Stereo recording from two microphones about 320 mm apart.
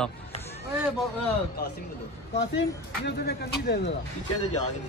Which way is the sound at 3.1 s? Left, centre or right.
Left.